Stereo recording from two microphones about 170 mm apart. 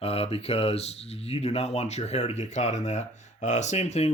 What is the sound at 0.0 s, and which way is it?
Speech, 35° left (ahead or behind).